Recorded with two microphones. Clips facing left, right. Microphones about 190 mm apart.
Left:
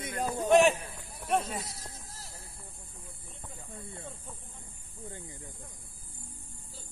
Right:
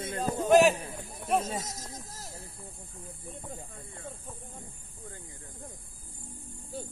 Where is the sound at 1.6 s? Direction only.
40° right (ahead or behind).